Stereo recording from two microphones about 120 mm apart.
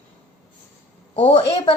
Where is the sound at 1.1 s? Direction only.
55° left (ahead or behind).